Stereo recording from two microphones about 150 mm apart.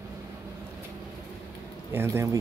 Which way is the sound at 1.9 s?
15° right (ahead or behind).